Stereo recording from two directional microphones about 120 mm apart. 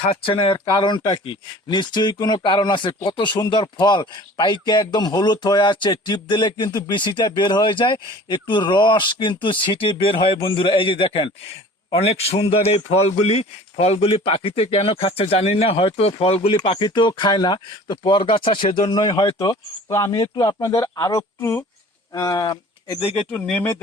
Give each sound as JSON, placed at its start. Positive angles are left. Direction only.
{"t": 0.1, "sound": "speech", "side_deg": 45}
{"t": 1.7, "sound": "speech", "side_deg": 35}
{"t": 11.9, "sound": "a man's voice", "side_deg": 60}
{"t": 23.0, "sound": "speech", "side_deg": 55}
{"t": 23.3, "sound": "speech", "side_deg": 15}